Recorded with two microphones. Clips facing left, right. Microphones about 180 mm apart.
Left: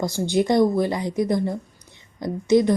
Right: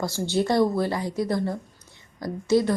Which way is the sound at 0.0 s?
15° left (ahead or behind).